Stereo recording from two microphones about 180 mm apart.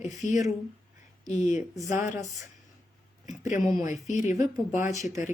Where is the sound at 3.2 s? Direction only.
40° left (ahead or behind).